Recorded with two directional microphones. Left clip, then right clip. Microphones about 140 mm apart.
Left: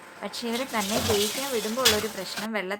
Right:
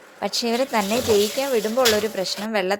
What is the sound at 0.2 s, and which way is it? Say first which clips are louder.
Speech: right 9 dB; 45° right (ahead or behind).